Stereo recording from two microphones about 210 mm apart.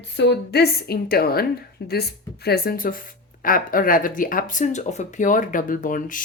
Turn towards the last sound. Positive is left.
turn(degrees=40)  # may be behind; listen again after turning